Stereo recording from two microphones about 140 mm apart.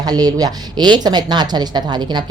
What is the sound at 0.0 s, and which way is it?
A woman's voice, 30° right (ahead or behind).